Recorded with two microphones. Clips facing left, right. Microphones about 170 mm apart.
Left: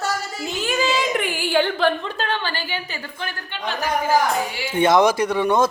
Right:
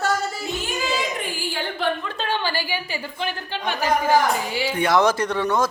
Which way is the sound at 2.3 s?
10° right (ahead or behind).